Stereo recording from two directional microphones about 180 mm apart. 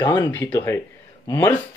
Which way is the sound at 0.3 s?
10° left (ahead or behind).